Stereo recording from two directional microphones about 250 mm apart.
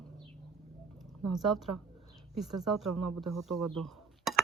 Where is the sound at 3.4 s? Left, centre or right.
Centre.